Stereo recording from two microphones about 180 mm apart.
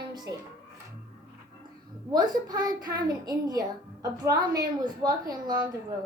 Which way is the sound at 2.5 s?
20° right (ahead or behind).